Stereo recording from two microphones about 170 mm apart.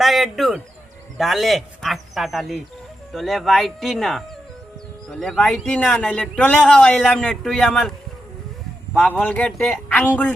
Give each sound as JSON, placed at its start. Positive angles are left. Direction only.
{"t": 0.0, "sound": "a man's voice", "side_deg": 0}